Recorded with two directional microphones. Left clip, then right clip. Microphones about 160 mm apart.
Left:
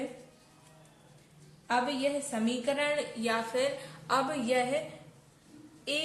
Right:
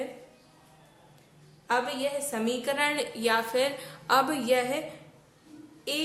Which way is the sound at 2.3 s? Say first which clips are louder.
Right 2 dB; 50° right (ahead or behind).